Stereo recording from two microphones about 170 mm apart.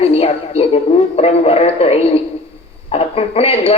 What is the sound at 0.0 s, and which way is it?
A woman's voice, 35° left (ahead or behind).